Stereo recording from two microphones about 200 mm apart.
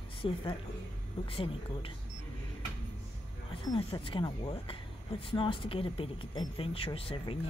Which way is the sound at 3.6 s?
20° left (ahead or behind).